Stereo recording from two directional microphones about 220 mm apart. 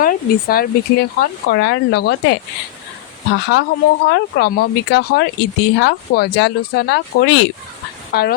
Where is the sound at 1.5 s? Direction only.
55° left (ahead or behind).